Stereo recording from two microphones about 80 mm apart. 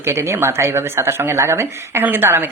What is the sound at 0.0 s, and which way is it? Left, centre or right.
Speech, right.